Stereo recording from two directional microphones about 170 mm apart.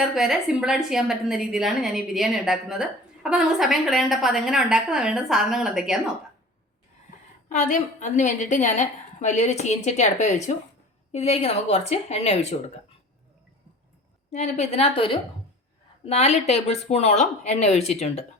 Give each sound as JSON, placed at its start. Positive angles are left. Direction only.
{"t": 0.1, "sound": "a woman's voice", "side_deg": 0}
{"t": 7.5, "sound": "a woman's voice", "side_deg": 45}
{"t": 14.3, "sound": "speech", "side_deg": 40}